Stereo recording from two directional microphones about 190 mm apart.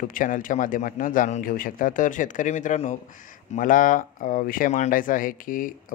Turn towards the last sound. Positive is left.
turn(degrees=45)  # may be behind; listen again after turning